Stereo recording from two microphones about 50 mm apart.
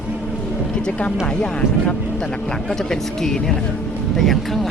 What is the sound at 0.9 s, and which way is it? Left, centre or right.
Speech, left.